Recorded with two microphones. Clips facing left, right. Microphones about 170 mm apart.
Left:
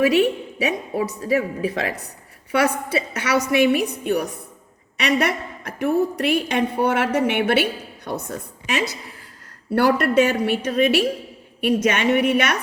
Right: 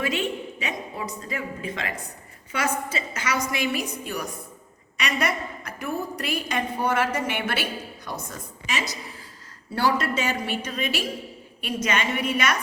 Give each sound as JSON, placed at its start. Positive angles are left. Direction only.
{"t": 0.1, "sound": "a woman's voice", "side_deg": 70}